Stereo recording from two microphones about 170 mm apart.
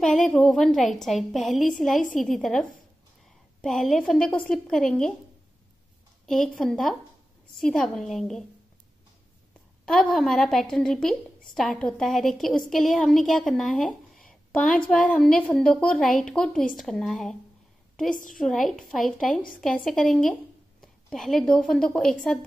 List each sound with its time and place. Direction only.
0.0 s a woman's voice: centre (ahead or behind)
6.2 s a woman's voice: centre (ahead or behind)
9.8 s a woman's voice: centre (ahead or behind)
18.1 s a woman's voice: 55° left (ahead or behind)
18.4 s a woman's voice: centre (ahead or behind)